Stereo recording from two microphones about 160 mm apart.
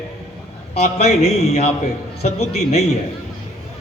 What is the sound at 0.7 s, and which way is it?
A man's voice, 45° left (ahead or behind).